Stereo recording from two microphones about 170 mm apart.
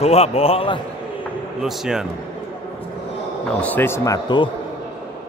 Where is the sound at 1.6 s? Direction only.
5° right (ahead or behind).